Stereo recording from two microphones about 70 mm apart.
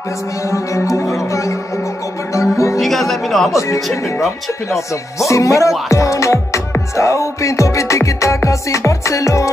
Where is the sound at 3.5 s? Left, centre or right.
Left.